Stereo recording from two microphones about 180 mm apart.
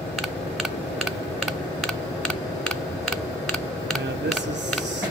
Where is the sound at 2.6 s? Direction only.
5° left (ahead or behind).